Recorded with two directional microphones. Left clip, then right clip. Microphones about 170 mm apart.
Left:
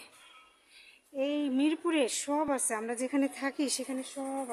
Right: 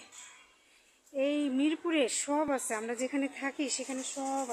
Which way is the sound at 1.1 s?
15° left (ahead or behind).